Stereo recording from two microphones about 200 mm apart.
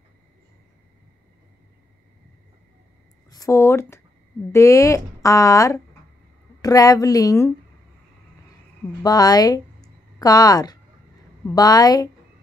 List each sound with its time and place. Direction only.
3.3 s a woman's voice: 15° left (ahead or behind)
9.0 s a woman's voice: 20° left (ahead or behind)